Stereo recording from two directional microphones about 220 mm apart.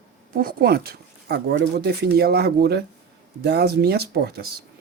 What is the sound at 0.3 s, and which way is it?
Speech, 45° right (ahead or behind).